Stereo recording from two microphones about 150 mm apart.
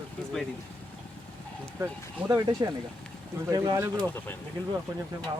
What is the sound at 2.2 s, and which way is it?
Speech, 35° right (ahead or behind).